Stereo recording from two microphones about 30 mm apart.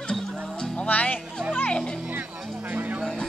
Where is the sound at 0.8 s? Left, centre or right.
Left.